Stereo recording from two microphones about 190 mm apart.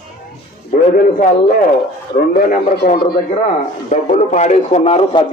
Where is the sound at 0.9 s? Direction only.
45° left (ahead or behind).